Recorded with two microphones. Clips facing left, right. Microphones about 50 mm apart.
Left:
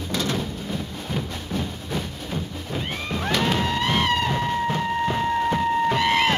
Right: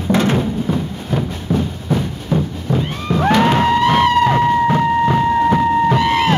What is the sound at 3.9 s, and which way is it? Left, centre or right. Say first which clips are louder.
Music: right 10 dB; right.